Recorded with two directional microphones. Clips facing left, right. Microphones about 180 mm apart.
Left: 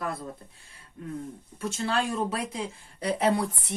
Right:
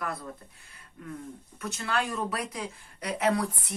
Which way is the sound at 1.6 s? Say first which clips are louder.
Left 3 dB; 30° left (ahead or behind).